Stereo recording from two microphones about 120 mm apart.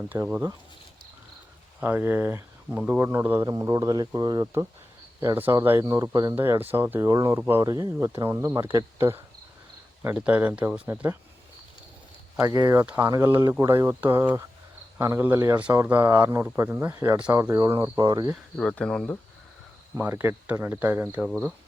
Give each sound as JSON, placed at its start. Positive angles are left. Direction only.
{"t": 0.1, "sound": "speech", "side_deg": -25}
{"t": 1.8, "sound": "speech", "side_deg": -20}
{"t": 5.2, "sound": "speech", "side_deg": -20}
{"t": 12.5, "sound": "speech", "side_deg": -20}
{"t": 12.8, "sound": "speech", "side_deg": -10}
{"t": 13.1, "sound": "speech", "side_deg": -25}
{"t": 17.9, "sound": "speech", "side_deg": -40}
{"t": 18.5, "sound": "speech", "side_deg": 5}
{"t": 20.0, "sound": "speech", "side_deg": -20}